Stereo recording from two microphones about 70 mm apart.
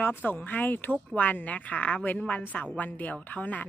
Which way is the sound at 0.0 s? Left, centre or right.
Left.